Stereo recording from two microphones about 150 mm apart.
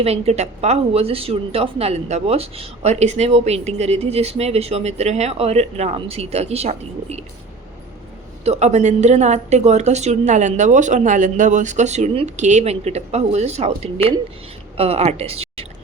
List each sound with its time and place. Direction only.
0.0 s a woman's voice: 45° right (ahead or behind)
8.4 s a woman's voice: 50° right (ahead or behind)